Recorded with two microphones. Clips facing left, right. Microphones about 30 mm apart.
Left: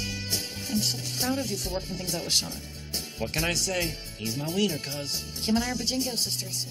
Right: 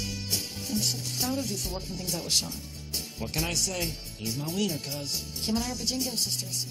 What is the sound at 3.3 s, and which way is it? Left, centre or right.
Speech, left.